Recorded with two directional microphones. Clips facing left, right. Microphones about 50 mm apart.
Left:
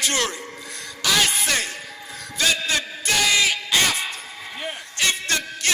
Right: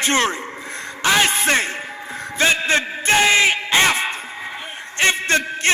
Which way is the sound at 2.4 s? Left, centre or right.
Right.